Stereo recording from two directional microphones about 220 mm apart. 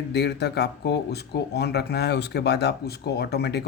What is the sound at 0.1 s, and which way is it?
Speech, 50° left (ahead or behind).